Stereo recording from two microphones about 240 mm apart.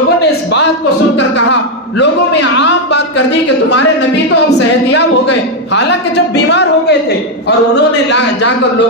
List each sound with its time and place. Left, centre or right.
1.5 s a sound: left
5.7 s a woman's voice: left
8.1 s a man's voice: left